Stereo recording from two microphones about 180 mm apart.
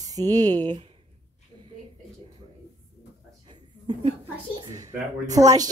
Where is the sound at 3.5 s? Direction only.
25° right (ahead or behind).